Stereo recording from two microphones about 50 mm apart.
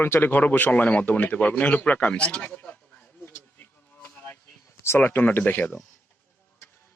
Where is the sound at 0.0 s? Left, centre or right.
Left.